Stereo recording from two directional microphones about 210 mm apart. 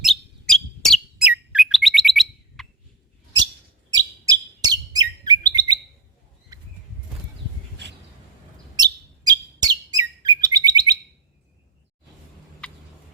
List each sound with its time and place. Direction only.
0.0 s bird: centre (ahead or behind)
1.5 s chirp: centre (ahead or behind)
3.9 s chirp: 20° right (ahead or behind)
6.5 s a sound: 15° right (ahead or behind)
8.7 s bird: 20° right (ahead or behind)
12.6 s fowl: 5° left (ahead or behind)